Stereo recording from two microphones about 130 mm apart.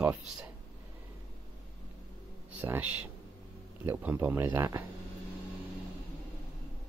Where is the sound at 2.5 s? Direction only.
15° right (ahead or behind).